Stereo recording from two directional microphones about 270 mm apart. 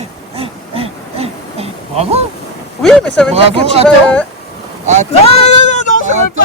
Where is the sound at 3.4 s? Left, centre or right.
Right.